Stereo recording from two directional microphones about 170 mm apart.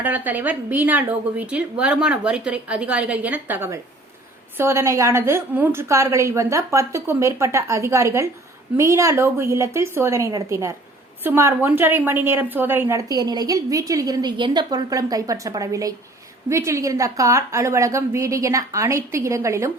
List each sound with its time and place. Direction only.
0.0 s a woman's voice: 10° right (ahead or behind)